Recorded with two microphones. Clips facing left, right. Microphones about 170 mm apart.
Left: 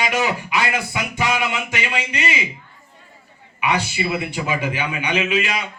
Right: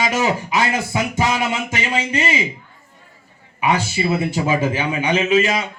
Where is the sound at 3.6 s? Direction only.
45° right (ahead or behind).